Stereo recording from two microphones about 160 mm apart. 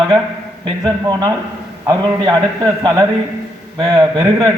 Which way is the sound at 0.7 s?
25° right (ahead or behind).